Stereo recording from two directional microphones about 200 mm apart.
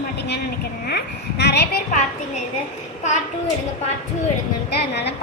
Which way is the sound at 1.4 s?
60° left (ahead or behind).